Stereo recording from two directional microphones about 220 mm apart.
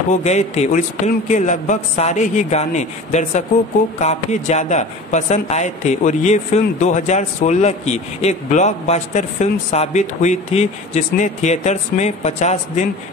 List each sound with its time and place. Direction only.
0.2 s speech: 30° left (ahead or behind)